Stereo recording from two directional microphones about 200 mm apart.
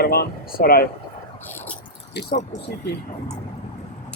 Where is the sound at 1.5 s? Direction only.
10° left (ahead or behind).